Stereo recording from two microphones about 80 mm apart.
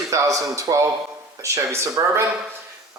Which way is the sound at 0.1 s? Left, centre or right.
Right.